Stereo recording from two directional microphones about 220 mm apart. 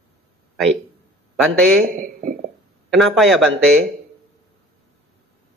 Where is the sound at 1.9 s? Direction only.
40° right (ahead or behind).